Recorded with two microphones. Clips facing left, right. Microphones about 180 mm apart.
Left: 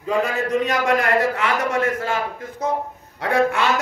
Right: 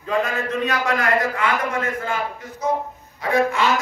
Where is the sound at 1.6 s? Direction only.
90° left.